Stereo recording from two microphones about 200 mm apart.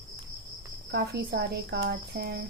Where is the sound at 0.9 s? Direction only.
55° right (ahead or behind).